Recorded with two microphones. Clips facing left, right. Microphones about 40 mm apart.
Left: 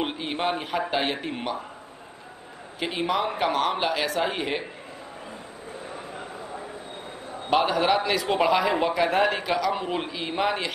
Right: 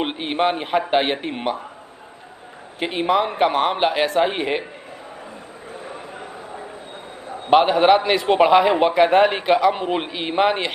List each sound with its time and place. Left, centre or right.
0.0 s a man's voice: right
2.8 s a man's voice: right
7.4 s a man's voice: right